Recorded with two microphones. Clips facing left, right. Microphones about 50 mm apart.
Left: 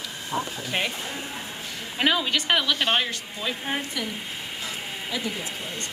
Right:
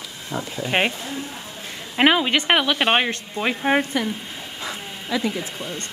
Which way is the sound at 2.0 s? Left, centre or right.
Right.